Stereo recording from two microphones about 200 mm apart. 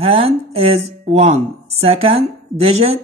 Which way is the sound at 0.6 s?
30° right (ahead or behind).